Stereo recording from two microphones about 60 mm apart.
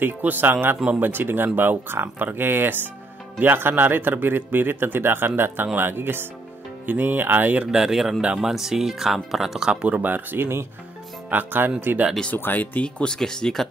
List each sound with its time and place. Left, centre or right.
0.0 s speech: right
6.9 s music: right
7.6 s speech: centre
9.7 s speech: right
11.2 s speech: right
12.4 s speech: left
12.8 s speech: centre